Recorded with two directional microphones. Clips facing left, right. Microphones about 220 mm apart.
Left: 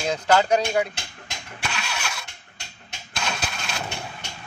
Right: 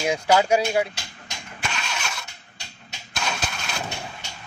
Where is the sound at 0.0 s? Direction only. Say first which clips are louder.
Right 1 dB; 10° right (ahead or behind).